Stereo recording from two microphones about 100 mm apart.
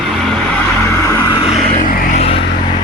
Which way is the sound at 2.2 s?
80° left.